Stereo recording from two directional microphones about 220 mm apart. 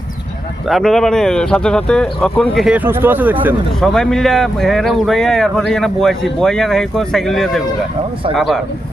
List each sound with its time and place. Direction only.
0.7 s speech: centre (ahead or behind)
3.8 s speech: centre (ahead or behind)